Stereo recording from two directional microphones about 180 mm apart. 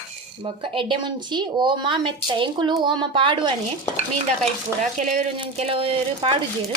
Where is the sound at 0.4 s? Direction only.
30° right (ahead or behind).